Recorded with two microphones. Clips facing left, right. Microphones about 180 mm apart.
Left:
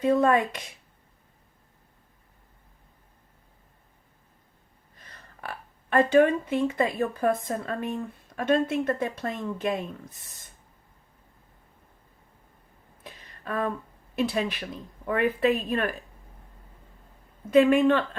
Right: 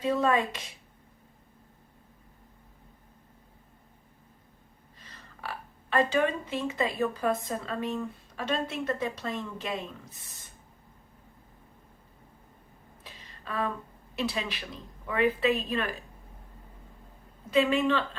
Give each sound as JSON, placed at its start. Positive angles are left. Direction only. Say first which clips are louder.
{"t": 0.0, "sound": "speech", "louder": "left 4 dB", "side_deg": 50}
{"t": 4.9, "sound": "speech", "louder": "left 1 dB", "side_deg": 55}
{"t": 13.0, "sound": "a sound", "louder": "left 5 dB", "side_deg": 55}
{"t": 14.2, "sound": "speech", "louder": "left 5 dB", "side_deg": 50}
{"t": 17.5, "sound": "speech", "louder": "left 6 dB", "side_deg": 55}